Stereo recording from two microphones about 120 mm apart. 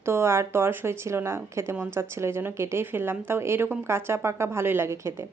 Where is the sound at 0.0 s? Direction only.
20° right (ahead or behind).